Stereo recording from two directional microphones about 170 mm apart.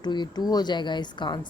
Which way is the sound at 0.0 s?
25° left (ahead or behind).